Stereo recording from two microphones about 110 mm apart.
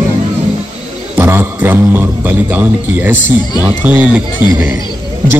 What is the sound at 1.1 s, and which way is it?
A man's voice, 20° right (ahead or behind).